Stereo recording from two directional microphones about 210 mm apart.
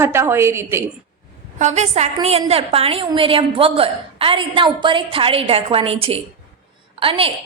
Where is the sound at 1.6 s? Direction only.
30° right (ahead or behind).